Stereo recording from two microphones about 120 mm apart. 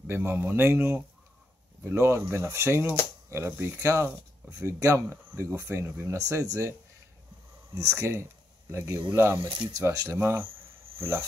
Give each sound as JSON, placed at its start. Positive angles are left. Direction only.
{"t": 0.0, "sound": "speech", "side_deg": -20}
{"t": 8.0, "sound": "speech", "side_deg": -20}